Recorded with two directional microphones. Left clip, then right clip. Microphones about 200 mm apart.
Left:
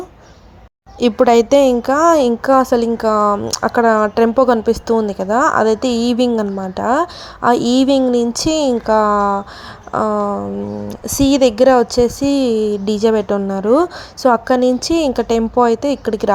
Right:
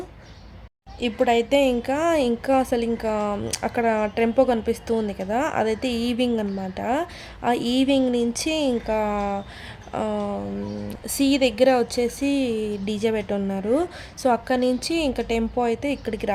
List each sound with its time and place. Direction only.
0.9 s speech: 30° left (ahead or behind)